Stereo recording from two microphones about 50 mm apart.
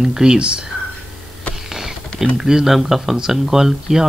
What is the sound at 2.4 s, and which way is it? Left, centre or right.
Speech, centre.